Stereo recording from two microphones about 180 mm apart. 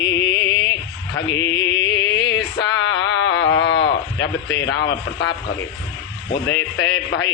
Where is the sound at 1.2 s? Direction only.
90° left.